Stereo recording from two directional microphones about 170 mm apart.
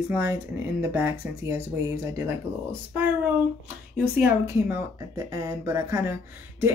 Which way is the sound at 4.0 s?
10° right (ahead or behind).